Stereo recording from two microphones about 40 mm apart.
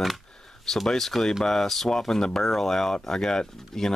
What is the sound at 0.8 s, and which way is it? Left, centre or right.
Speech, centre.